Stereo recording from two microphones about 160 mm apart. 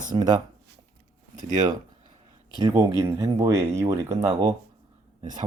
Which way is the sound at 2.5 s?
20° right (ahead or behind).